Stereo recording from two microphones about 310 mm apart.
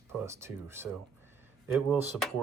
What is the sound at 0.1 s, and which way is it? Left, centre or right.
Speech, centre.